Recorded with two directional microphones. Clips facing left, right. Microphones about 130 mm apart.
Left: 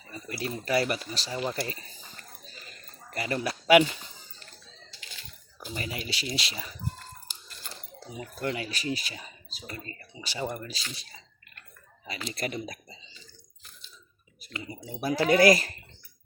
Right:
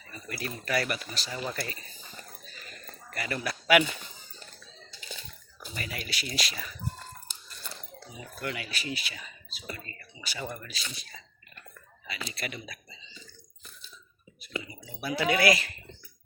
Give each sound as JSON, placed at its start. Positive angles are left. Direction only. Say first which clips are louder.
{"t": 0.1, "sound": "speech", "louder": "left 3 dB", "side_deg": 30}
{"t": 3.1, "sound": "speech", "louder": "left 3 dB", "side_deg": 30}
{"t": 5.6, "sound": "speech", "louder": "left 3 dB", "side_deg": 30}
{"t": 8.4, "sound": "speech", "louder": "left 4 dB", "side_deg": 30}
{"t": 14.6, "sound": "speech", "louder": "left 5 dB", "side_deg": 40}